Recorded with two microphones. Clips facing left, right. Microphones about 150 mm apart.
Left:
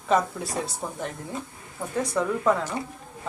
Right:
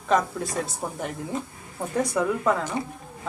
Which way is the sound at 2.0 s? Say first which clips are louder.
Right 1 dB; 10° right (ahead or behind).